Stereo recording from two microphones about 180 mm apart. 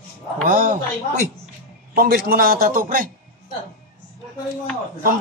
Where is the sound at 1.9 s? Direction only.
55° right (ahead or behind).